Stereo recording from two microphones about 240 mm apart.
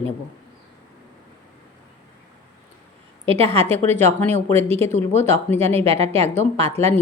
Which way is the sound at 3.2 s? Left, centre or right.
Right.